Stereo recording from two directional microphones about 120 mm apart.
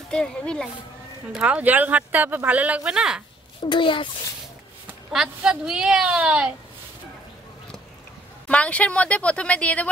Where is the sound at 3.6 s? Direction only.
45° left (ahead or behind).